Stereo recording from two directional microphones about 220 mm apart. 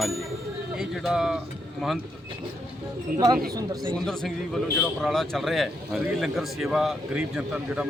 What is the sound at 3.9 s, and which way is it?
A man's voice, centre (ahead or behind).